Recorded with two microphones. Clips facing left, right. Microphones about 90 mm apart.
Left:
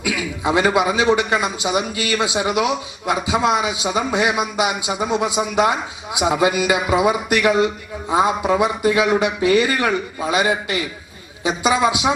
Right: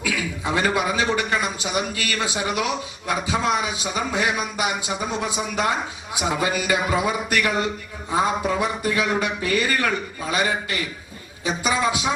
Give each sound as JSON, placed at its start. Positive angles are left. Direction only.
{"t": 0.0, "sound": "a man's voice", "side_deg": 15}